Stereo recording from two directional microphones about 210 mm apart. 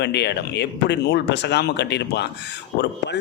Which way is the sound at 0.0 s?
55° left (ahead or behind).